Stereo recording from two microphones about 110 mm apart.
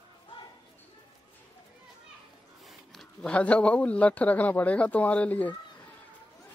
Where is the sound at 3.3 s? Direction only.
10° left (ahead or behind).